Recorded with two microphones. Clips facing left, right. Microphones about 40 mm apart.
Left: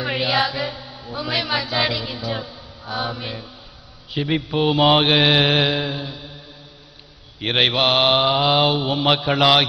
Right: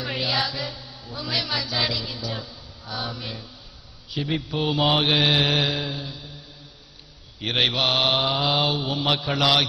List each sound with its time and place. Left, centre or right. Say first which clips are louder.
0.0 s chant: left 5 dB; centre
0.4 s mantra: left 5 dB; left
4.2 s mantra: left 5 dB; centre
4.5 s mantra: left 6 dB; left
7.4 s mantra: left 4 dB; left
8.7 s mantra: left 5 dB; centre
9.4 s mantra: left 4 dB; left